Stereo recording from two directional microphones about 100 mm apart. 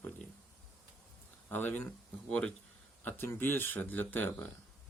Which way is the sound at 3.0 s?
20° left (ahead or behind).